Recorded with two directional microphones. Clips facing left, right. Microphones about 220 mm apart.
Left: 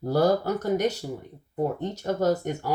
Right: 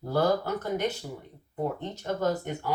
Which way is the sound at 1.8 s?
40° left (ahead or behind).